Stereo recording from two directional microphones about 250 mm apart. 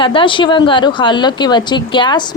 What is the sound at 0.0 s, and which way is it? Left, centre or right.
Speech, centre.